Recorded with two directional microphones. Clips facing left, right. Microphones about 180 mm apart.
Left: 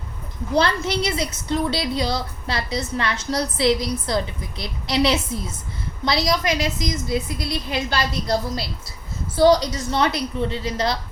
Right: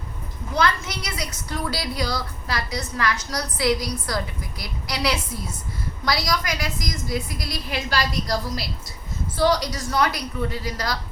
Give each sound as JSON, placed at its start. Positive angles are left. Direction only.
{"t": 0.5, "sound": "a woman's voice", "side_deg": 30}